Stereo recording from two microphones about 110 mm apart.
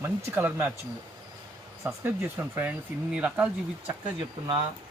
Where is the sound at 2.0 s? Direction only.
15° right (ahead or behind).